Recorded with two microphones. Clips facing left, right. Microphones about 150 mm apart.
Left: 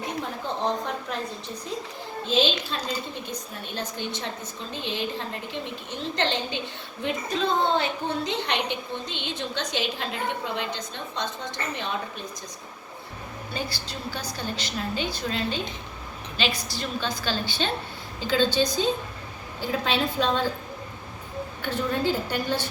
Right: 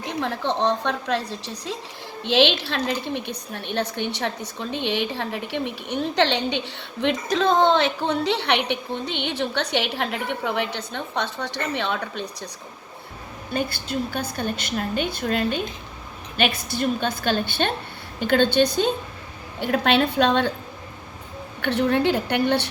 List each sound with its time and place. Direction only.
0.2 s a woman's voice: 80° right
7.0 s a woman's voice: 85° right
13.5 s a woman's voice: 55° right (ahead or behind)
21.6 s a woman's voice: 70° right (ahead or behind)